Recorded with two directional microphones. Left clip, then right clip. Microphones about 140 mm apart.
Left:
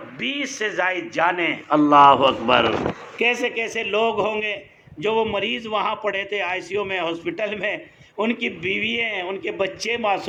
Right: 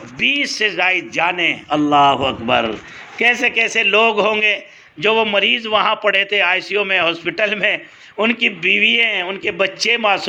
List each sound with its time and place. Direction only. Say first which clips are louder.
0.2 s a man's voice: right 9 dB; 35° right (ahead or behind); by 10.2 s 15° right (ahead or behind)